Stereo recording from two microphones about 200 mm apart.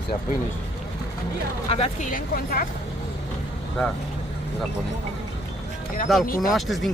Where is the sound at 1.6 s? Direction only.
30° left (ahead or behind).